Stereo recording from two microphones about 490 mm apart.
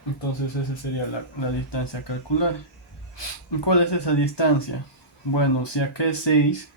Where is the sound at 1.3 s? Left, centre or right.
Left.